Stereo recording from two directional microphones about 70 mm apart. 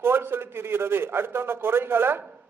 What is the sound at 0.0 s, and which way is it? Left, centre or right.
Speech, right.